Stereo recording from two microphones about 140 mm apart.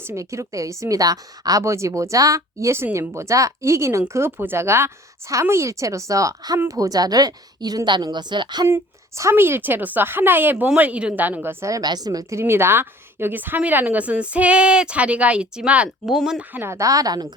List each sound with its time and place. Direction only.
0.0 s a woman's voice: 20° right (ahead or behind)
8.6 s a woman's voice: 20° right (ahead or behind)